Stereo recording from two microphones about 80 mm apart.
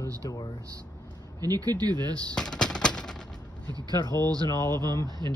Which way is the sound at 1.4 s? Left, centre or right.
Right.